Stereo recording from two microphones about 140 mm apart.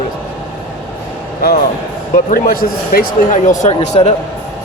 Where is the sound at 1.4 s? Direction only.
90° left; by 4.1 s 50° left (ahead or behind).